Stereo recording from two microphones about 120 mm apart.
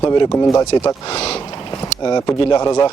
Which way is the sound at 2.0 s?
35° left (ahead or behind).